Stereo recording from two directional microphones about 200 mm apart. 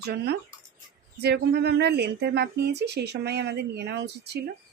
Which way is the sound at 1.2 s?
55° right (ahead or behind).